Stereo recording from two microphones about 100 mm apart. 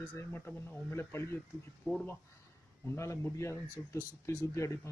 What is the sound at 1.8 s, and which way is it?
Speech, centre (ahead or behind).